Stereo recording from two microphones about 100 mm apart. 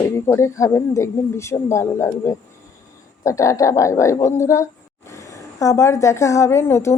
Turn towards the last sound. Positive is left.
turn(degrees=25)  # may be behind; listen again after turning